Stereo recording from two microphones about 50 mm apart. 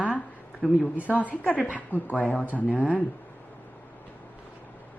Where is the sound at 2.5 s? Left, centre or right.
Left.